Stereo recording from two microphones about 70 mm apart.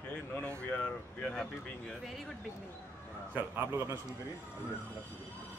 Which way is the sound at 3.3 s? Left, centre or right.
Right.